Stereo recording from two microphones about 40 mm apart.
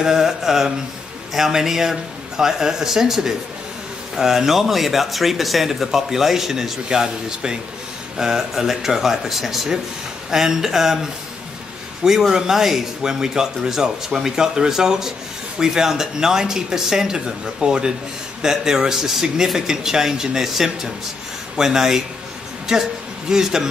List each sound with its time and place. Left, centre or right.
0.0 s a man's voice: centre